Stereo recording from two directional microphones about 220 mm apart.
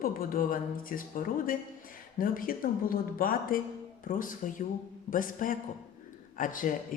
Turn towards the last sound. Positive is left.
turn(degrees=35)  # may be behind; listen again after turning